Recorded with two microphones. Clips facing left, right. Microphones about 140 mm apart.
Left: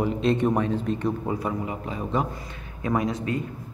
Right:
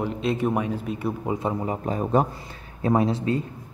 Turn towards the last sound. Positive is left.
turn(degrees=-30)  # may be behind; listen again after turning